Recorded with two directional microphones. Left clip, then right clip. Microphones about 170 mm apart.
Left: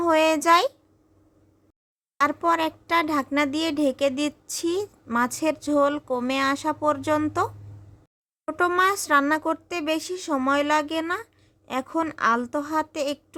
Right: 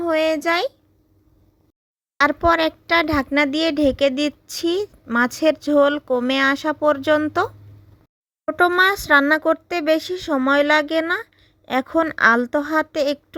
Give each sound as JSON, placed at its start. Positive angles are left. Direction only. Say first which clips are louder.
{"t": 0.0, "sound": "a child's voice", "louder": "right 1 dB", "side_deg": -20}
{"t": 2.1, "sound": "a child's voice", "louder": "right 5 dB", "side_deg": -25}